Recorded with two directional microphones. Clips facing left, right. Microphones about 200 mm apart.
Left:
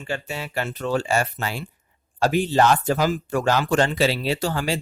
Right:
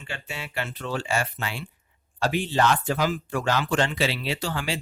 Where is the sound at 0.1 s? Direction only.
40° left (ahead or behind).